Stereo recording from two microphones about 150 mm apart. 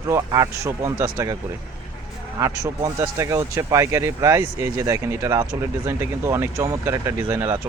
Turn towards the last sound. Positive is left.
turn(degrees=-15)  # may be behind; listen again after turning